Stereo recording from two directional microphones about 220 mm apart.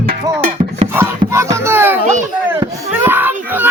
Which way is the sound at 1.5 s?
10° right (ahead or behind).